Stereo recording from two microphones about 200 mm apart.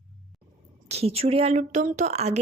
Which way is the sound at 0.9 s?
30° right (ahead or behind).